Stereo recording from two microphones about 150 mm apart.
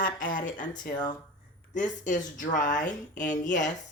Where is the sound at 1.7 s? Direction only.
55° left (ahead or behind).